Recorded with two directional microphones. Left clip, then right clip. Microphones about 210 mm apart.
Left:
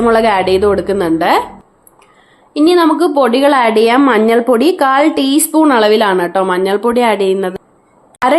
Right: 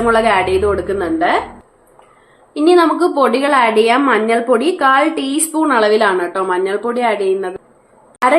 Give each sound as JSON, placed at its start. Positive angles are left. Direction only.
{"t": 0.0, "sound": "a woman's voice", "side_deg": 40}
{"t": 2.5, "sound": "a woman's voice", "side_deg": 40}